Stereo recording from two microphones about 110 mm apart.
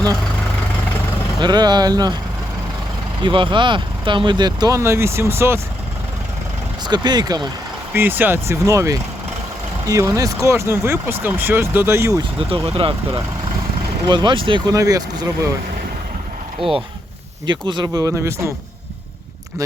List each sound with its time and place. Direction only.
1.4 s speech: 40° right (ahead or behind)
3.2 s speech: 50° right (ahead or behind)
4.8 s speech: 25° right (ahead or behind)
6.8 s speech: 40° right (ahead or behind)
7.9 s speech: 20° right (ahead or behind)
12.6 s speech: 60° right (ahead or behind)
14.7 s speech: 30° right (ahead or behind)
16.6 s speech: 5° right (ahead or behind)
17.4 s speech: 45° right (ahead or behind); by 18.5 s 25° right (ahead or behind)